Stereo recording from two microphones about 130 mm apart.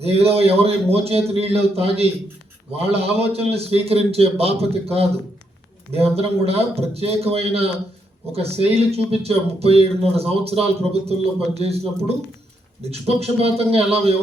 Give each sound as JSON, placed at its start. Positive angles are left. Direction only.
{"t": 0.0, "sound": "speech", "side_deg": -50}